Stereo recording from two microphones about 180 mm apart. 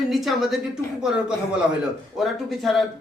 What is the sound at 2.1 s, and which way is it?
Speech, centre (ahead or behind).